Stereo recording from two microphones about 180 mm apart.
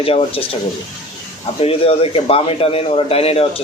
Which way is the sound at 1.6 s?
30° left (ahead or behind).